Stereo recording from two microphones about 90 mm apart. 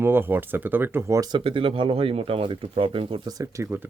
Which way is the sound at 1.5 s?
80° right.